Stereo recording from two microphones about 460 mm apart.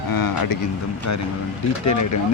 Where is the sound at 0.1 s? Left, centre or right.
Left.